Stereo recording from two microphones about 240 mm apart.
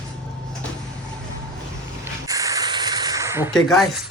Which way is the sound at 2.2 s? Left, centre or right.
Centre.